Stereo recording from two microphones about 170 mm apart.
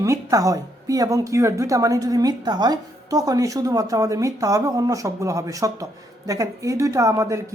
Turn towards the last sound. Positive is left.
turn(degrees=-15)  # may be behind; listen again after turning